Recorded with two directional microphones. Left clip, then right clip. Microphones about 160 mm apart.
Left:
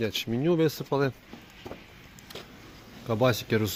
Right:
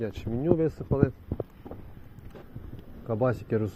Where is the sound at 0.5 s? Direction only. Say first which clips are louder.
Left 1 dB; 60° left (ahead or behind).